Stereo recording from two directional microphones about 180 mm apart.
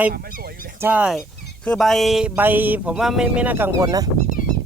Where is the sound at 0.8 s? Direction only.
10° right (ahead or behind).